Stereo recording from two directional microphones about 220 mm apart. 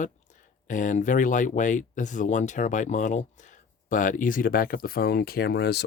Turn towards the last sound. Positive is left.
turn(degrees=50)  # may be behind; listen again after turning